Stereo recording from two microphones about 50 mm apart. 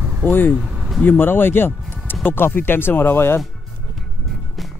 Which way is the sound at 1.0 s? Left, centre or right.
Left.